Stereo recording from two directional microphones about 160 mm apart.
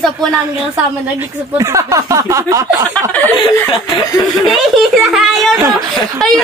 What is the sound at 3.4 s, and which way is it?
Chuckle, 30° left (ahead or behind).